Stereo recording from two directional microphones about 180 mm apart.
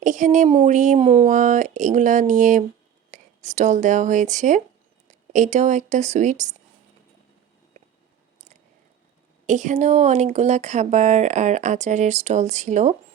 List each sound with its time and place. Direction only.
0.0 s speech: 45° right (ahead or behind)
9.5 s speech: 40° right (ahead or behind)